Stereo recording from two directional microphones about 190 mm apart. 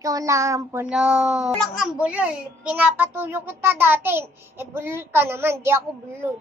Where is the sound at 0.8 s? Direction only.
5° right (ahead or behind).